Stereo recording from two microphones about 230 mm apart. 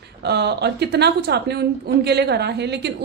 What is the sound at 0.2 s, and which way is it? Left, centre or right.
A woman's voice, right.